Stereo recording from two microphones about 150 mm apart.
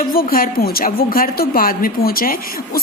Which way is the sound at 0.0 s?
75° left (ahead or behind).